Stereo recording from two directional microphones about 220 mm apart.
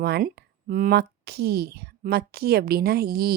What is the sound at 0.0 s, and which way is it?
A woman's voice, 45° right (ahead or behind).